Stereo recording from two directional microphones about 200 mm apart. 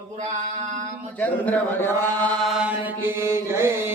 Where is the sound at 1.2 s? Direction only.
10° left (ahead or behind).